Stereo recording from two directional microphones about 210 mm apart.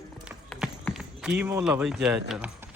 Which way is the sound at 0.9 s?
5° right (ahead or behind).